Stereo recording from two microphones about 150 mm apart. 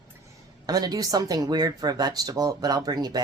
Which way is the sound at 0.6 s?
25° right (ahead or behind).